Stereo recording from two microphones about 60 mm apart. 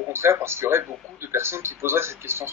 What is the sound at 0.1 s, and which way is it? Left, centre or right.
Speech, right.